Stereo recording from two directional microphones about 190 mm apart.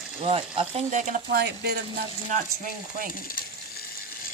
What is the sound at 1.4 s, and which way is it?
Speech, 60° right (ahead or behind).